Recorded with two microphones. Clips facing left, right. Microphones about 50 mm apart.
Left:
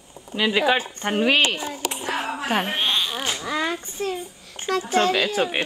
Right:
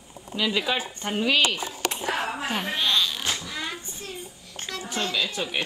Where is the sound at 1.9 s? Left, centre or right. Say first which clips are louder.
Even; centre.